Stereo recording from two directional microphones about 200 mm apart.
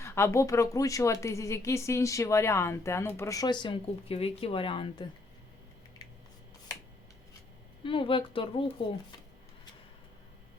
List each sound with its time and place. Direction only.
0.0 s a woman's voice: 15° left (ahead or behind)
7.9 s speech: 25° left (ahead or behind)